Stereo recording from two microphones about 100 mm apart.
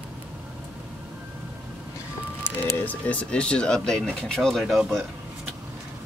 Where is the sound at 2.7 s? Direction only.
15° left (ahead or behind); by 5.1 s centre (ahead or behind).